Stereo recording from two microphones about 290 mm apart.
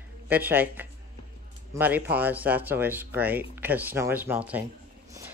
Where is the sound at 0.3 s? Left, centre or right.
Centre.